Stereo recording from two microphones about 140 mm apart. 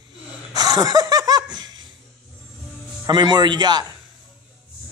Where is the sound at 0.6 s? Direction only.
25° right (ahead or behind).